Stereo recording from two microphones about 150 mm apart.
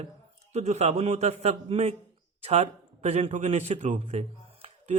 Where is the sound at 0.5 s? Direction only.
45° right (ahead or behind).